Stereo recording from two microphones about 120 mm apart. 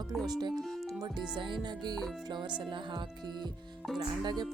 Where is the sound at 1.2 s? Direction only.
40° right (ahead or behind).